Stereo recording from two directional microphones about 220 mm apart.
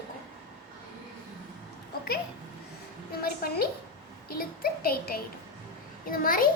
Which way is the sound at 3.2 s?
45° left (ahead or behind).